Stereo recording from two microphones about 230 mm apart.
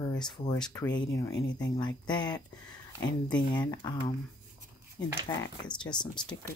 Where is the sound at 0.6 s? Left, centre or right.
Centre.